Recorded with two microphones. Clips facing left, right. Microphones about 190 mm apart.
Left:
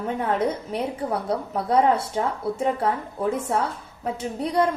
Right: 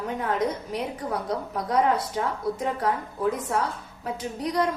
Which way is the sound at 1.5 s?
25° left (ahead or behind).